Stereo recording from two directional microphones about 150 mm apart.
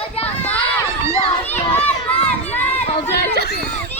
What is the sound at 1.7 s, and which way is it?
Crowd, 10° left (ahead or behind).